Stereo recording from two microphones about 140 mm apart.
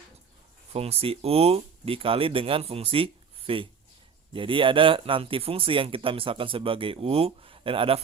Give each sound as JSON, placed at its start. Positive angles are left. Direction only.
{"t": 0.7, "sound": "speech", "side_deg": -45}